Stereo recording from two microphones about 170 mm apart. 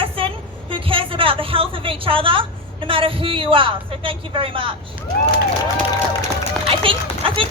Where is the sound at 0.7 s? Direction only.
30° right (ahead or behind).